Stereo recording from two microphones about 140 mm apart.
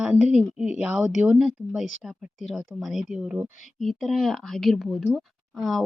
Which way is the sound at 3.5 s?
60° left (ahead or behind).